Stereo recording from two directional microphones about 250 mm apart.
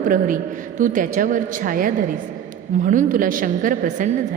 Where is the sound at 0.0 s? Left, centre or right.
Right.